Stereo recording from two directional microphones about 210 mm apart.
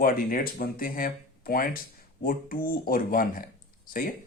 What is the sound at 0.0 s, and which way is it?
Speech, 45° left (ahead or behind).